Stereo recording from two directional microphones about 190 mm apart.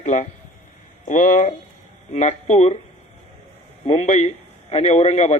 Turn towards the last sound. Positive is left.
turn(degrees=35)  # may be behind; listen again after turning